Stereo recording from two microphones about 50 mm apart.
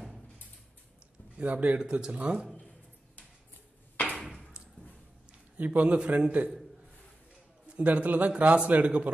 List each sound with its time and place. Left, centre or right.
1.4 s a man's voice: right
1.8 s a man's voice: centre
5.6 s a man's voice: right
7.6 s a man's voice: right